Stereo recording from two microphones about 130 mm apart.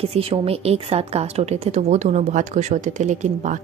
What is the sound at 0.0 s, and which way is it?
A woman's voice, 50° right (ahead or behind).